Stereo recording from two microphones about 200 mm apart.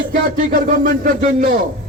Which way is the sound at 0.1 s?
40° right (ahead or behind).